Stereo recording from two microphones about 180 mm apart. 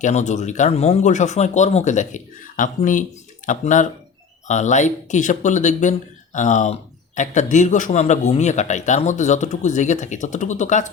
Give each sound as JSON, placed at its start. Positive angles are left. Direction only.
{"t": 0.0, "sound": "a man's voice", "side_deg": 40}